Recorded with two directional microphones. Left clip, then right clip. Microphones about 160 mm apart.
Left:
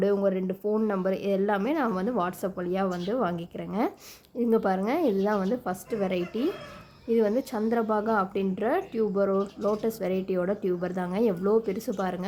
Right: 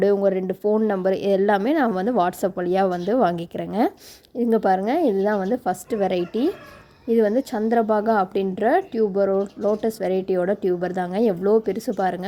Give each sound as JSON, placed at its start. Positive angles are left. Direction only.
{"t": 0.0, "sound": "a woman's voice", "side_deg": -30}
{"t": 4.4, "sound": "a woman's voice", "side_deg": -25}